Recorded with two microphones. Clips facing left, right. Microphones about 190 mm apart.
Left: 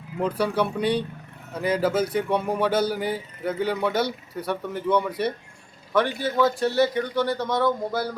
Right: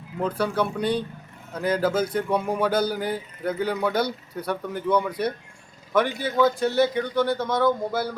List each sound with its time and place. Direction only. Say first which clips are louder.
0.2 s a man's voice: left 1 dB; 10° left (ahead or behind)
5.9 s a man's voice: even; 20° right (ahead or behind)
6.4 s a man's voice: right 1 dB; centre (ahead or behind)